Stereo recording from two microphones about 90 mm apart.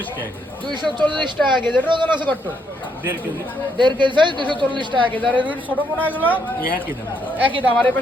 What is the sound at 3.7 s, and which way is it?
A woman's voice, 60° right (ahead or behind).